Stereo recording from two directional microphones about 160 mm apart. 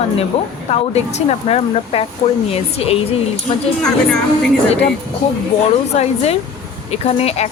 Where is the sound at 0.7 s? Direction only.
40° left (ahead or behind).